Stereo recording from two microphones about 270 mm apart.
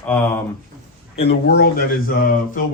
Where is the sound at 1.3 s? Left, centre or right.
Left.